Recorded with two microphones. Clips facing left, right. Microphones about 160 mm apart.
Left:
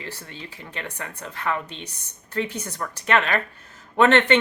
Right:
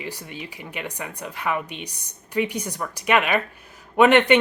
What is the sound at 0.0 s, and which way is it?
Speech, 15° right (ahead or behind).